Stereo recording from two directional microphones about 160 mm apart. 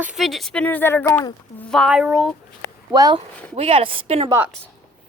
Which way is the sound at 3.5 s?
35° right (ahead or behind).